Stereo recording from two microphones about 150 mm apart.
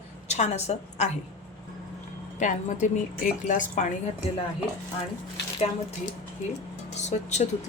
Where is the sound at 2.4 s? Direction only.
55° left (ahead or behind).